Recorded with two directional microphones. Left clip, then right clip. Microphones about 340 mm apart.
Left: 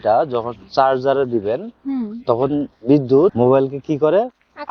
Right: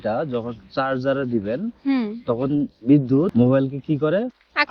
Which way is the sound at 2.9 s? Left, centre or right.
Centre.